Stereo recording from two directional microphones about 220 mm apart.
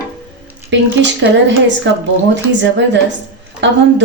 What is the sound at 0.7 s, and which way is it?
A woman's voice, 55° right (ahead or behind).